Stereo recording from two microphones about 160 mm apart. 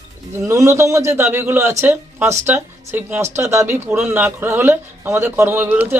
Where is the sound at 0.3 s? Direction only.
20° right (ahead or behind).